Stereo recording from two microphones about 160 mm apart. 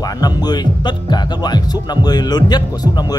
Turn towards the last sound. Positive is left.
turn(degrees=25)  # may be behind; listen again after turning